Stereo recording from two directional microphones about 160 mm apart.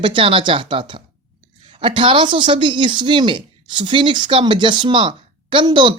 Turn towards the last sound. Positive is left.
turn(degrees=-30)  # may be behind; listen again after turning